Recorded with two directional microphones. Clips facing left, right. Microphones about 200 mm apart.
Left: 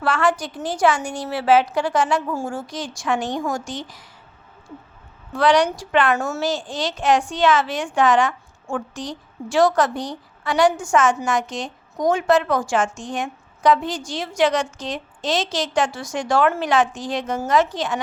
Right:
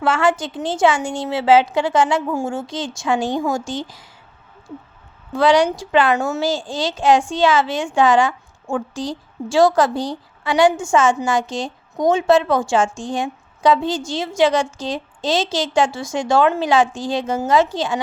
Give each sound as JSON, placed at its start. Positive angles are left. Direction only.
{"t": 0.0, "sound": "a woman's voice", "side_deg": -25}
{"t": 5.3, "sound": "a woman's voice", "side_deg": -25}